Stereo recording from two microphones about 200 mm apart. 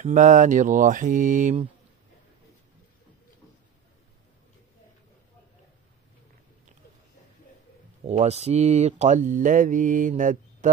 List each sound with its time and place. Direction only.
0.0 s speech: 40° right (ahead or behind)
8.0 s speech: 35° right (ahead or behind)